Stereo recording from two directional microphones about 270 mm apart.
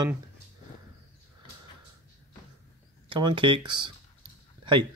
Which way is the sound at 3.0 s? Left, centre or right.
Centre.